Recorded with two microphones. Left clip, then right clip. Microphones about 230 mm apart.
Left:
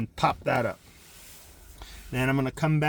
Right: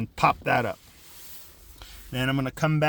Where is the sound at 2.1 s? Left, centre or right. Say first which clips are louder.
Left 1 dB; right.